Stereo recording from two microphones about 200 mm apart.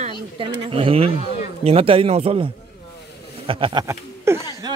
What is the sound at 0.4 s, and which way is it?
Speech, 25° right (ahead or behind).